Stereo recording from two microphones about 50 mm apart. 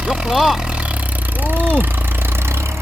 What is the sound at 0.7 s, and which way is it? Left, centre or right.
Vehicle, right.